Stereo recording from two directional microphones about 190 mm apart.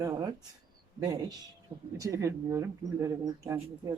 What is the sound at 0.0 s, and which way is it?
Speech, 20° right (ahead or behind).